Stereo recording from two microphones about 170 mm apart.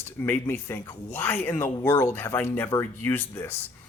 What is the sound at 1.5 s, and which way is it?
Speech, 25° left (ahead or behind).